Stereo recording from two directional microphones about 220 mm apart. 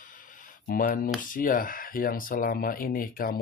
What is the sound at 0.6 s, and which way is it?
Speech, 40° left (ahead or behind).